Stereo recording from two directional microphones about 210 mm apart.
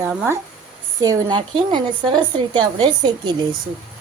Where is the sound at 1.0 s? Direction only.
20° right (ahead or behind).